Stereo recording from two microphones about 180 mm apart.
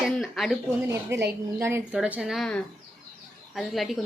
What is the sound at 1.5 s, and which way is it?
A woman's voice, 15° right (ahead or behind).